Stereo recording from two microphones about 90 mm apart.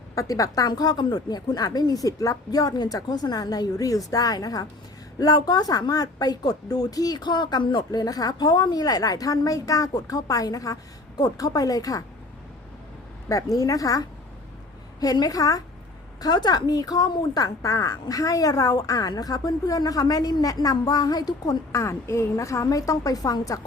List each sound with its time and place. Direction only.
0.2 s a woman's voice: 40° left (ahead or behind)
13.6 s a woman's voice: 40° left (ahead or behind)
21.7 s a woman's voice: 35° left (ahead or behind)